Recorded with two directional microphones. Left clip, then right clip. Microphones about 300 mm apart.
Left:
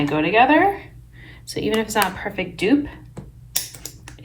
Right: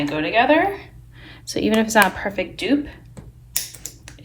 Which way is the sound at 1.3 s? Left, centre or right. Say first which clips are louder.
Right 3 dB; centre.